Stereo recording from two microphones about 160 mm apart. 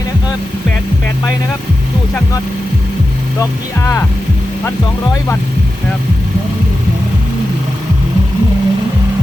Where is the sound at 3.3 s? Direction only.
15° left (ahead or behind).